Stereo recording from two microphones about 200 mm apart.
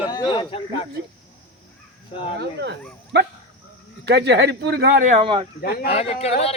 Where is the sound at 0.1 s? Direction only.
25° left (ahead or behind).